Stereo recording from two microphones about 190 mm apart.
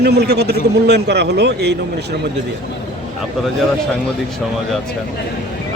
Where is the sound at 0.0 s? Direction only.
60° right (ahead or behind).